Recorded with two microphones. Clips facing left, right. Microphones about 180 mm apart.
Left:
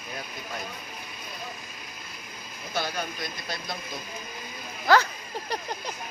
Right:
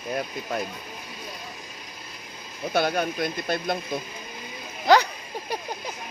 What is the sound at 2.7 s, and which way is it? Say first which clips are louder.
Speech: right 8 dB; 55° right (ahead or behind).